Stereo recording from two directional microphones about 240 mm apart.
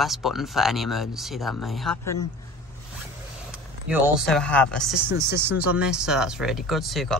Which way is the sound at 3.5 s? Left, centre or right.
Centre.